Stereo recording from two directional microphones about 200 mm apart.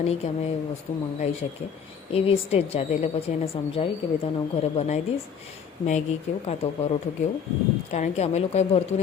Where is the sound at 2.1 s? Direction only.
30° left (ahead or behind).